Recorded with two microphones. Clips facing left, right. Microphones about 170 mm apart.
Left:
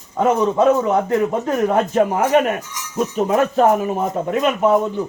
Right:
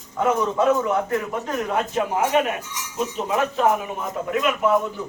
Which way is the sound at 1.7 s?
50° left (ahead or behind).